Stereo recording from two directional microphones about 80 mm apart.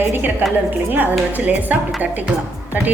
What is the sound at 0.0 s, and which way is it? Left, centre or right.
Speech, right.